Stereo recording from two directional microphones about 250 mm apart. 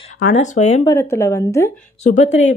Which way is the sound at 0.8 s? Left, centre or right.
Centre.